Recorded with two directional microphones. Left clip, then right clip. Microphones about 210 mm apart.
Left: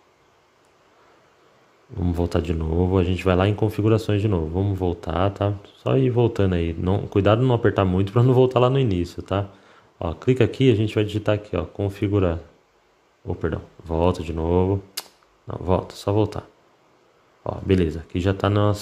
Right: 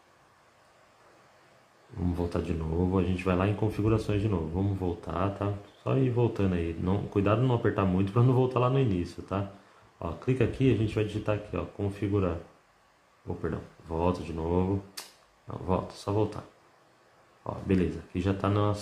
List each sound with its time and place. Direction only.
2.1 s speech: 40° left (ahead or behind)
13.4 s speech: 40° left (ahead or behind)
17.4 s speech: 40° left (ahead or behind)